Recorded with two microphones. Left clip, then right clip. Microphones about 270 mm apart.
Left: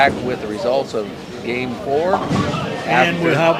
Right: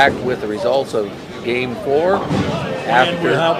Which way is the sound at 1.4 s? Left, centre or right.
Centre.